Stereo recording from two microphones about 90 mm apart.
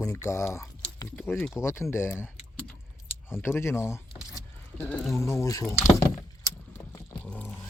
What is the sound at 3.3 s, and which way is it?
Speech, 25° left (ahead or behind).